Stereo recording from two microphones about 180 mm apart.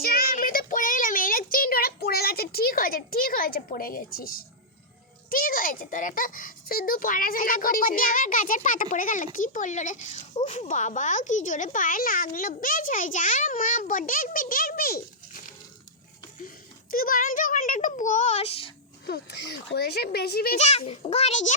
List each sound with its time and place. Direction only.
0.0 s child singing: 55° left (ahead or behind)
5.3 s a child's voice: 50° left (ahead or behind)
16.9 s a child's voice: 50° left (ahead or behind); by 18.7 s 30° left (ahead or behind)
19.0 s speech: 65° left (ahead or behind)
20.6 s a child's voice: 35° left (ahead or behind)